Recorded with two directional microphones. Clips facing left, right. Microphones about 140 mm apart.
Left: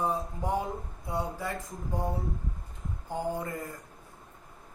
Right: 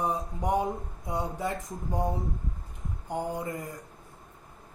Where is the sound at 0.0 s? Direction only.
15° right (ahead or behind).